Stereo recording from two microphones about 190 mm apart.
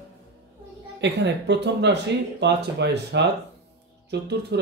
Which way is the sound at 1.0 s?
65° right (ahead or behind).